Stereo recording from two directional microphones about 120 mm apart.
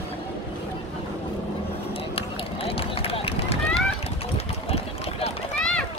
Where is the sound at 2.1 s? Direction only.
50° left (ahead or behind).